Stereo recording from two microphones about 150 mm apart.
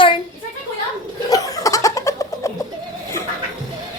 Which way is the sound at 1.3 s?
25° left (ahead or behind).